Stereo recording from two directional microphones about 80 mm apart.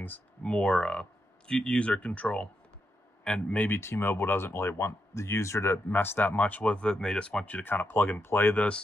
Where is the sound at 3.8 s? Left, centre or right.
Left.